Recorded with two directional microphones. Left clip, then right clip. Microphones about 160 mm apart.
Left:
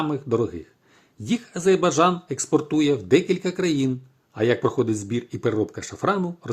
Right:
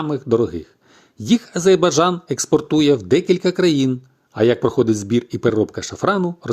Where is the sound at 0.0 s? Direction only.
30° right (ahead or behind).